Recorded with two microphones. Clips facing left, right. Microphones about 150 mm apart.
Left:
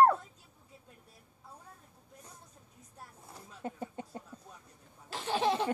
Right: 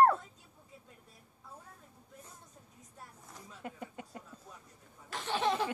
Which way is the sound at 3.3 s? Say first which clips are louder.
Left 4 dB; 30° left (ahead or behind).